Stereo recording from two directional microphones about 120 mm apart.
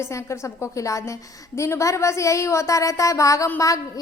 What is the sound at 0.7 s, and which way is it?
A woman's voice, 25° left (ahead or behind).